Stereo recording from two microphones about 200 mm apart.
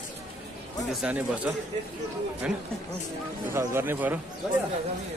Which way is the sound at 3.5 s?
10° right (ahead or behind).